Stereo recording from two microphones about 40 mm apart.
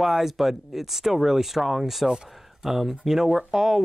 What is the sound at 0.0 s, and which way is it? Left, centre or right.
Speech, centre.